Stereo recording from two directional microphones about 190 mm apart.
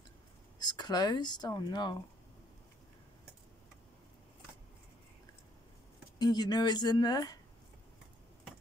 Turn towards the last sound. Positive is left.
turn(degrees=20)  # may be behind; listen again after turning